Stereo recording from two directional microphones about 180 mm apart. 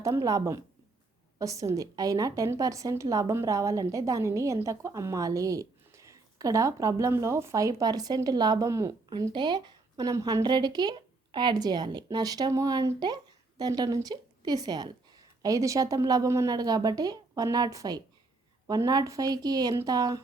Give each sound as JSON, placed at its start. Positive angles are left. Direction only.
{"t": 0.0, "sound": "a woman's voice", "side_deg": -15}